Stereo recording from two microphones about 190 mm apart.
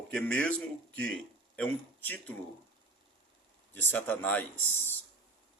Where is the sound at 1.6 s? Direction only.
10° left (ahead or behind).